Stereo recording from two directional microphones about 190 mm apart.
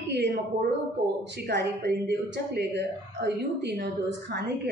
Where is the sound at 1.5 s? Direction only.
60° right (ahead or behind).